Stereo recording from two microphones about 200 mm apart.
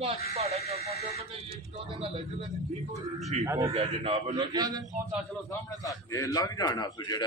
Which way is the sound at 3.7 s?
30° right (ahead or behind).